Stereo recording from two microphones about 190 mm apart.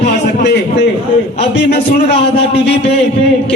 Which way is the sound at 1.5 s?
60° left (ahead or behind).